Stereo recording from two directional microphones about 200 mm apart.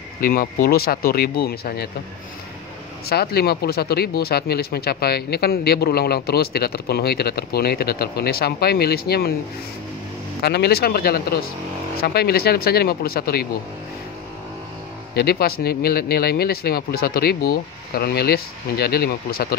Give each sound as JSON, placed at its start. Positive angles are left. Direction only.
{"t": 0.2, "sound": "speech", "side_deg": 45}
{"t": 3.1, "sound": "speech", "side_deg": 50}
{"t": 10.4, "sound": "speech", "side_deg": 55}
{"t": 15.1, "sound": "speech", "side_deg": 50}